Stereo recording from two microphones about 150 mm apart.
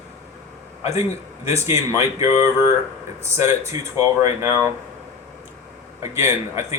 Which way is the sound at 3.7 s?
20° right (ahead or behind).